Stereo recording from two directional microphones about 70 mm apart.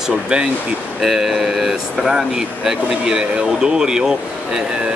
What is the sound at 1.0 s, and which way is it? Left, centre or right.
Speech, centre.